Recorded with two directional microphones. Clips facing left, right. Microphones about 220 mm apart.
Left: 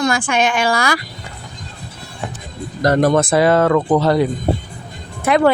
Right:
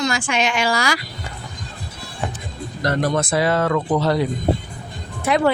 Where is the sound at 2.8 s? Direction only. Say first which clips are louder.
Left 7 dB; 50° left (ahead or behind).